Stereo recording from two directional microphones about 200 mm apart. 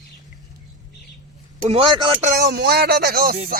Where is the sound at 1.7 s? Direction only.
25° right (ahead or behind).